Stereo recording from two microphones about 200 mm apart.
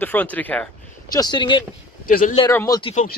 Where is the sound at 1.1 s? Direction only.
20° left (ahead or behind).